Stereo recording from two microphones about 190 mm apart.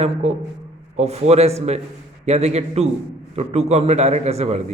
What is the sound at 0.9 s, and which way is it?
A man's voice, 35° right (ahead or behind).